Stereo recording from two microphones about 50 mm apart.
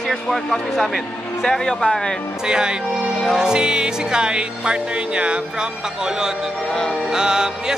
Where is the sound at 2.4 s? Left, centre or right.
Centre.